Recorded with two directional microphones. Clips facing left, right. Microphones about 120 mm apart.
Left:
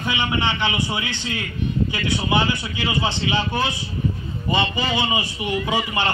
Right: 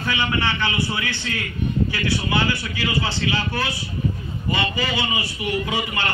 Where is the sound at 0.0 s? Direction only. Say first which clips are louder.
Even; 20° left (ahead or behind).